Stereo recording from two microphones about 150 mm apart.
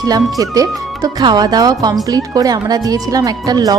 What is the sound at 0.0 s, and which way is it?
A woman's voice, 25° right (ahead or behind).